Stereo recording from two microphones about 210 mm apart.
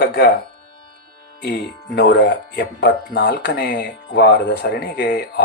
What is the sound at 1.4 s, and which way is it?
Speech, 50° left (ahead or behind).